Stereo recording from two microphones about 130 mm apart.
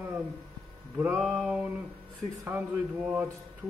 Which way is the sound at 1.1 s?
5° right (ahead or behind).